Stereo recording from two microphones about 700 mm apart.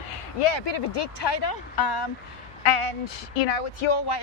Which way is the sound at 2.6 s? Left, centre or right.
Left.